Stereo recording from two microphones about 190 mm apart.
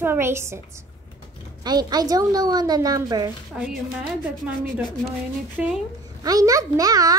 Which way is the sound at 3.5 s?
5° right (ahead or behind).